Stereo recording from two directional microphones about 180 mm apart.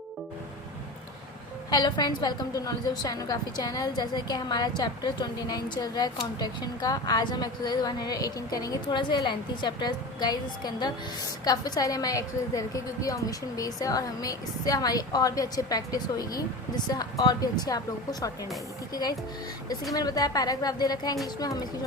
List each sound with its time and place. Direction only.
1.7 s a woman's voice: 25° left (ahead or behind)
19.9 s a woman's voice: 20° left (ahead or behind)